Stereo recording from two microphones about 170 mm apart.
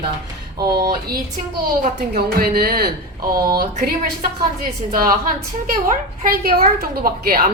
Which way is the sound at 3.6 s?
60° right (ahead or behind).